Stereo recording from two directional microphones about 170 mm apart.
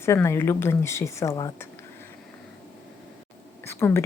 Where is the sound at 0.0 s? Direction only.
15° left (ahead or behind).